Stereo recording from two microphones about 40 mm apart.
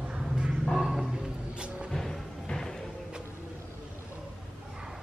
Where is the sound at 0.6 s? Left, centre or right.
Centre.